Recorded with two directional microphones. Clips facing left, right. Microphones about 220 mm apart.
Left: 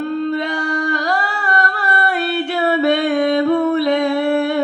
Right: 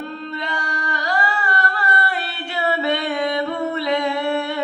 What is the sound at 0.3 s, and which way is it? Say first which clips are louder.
Singing: left 9 dB; 50° left (ahead or behind).